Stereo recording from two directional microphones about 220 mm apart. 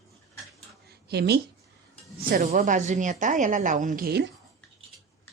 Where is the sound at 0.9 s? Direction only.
45° right (ahead or behind).